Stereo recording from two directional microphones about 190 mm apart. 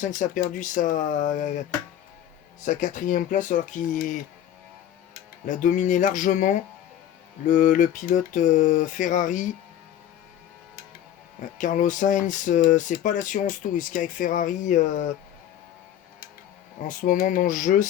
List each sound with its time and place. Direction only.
0.0 s speech: 40° left (ahead or behind)
2.6 s speech: 40° left (ahead or behind)
5.6 s a sound: 40° left (ahead or behind)
11.5 s speech: 40° left (ahead or behind)
16.9 s speech: 45° left (ahead or behind)